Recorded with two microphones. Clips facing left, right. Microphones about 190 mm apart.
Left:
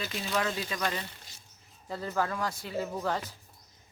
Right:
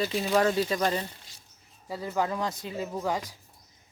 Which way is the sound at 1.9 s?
15° right (ahead or behind).